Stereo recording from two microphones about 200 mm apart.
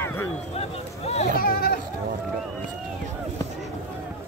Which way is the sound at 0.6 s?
30° left (ahead or behind).